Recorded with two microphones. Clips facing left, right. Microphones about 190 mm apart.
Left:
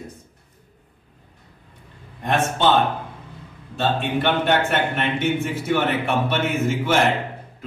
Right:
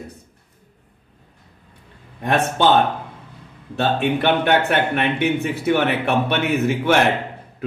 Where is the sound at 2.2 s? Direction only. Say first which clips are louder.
Right 2 dB; 65° right (ahead or behind).